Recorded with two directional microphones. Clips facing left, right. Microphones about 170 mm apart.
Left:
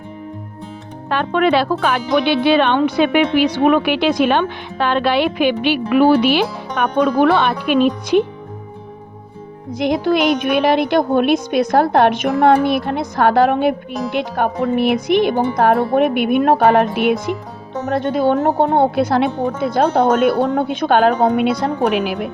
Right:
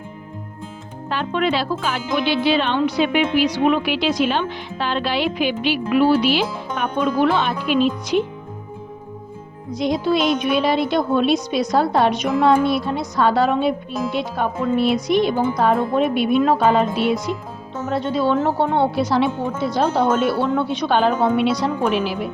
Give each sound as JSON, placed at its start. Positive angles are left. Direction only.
{"t": 1.1, "sound": "a woman's voice", "side_deg": 60}
{"t": 9.7, "sound": "a woman's voice", "side_deg": 55}